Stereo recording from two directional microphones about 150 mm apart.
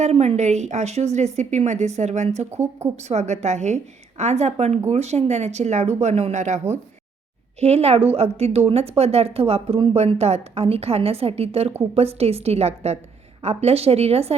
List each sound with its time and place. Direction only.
0.0 s speech: 45° right (ahead or behind)
2.5 s speech: 20° right (ahead or behind)
2.9 s speech: 50° right (ahead or behind)